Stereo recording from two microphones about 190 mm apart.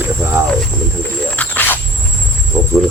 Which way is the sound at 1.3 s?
10° left (ahead or behind).